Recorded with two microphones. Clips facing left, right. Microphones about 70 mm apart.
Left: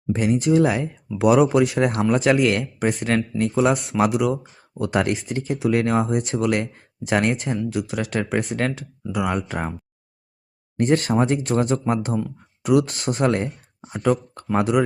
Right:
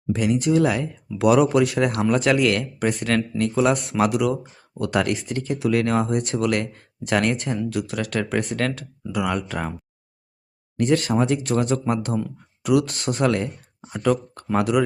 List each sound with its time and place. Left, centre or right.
0.1 s speech: left; by 4.3 s centre
4.8 s speech: left
10.8 s speech: left
13.8 s speech: centre